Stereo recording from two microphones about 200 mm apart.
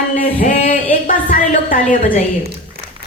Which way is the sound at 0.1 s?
40° left (ahead or behind).